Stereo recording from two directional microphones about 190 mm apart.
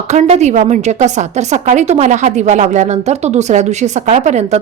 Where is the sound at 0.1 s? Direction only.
35° right (ahead or behind).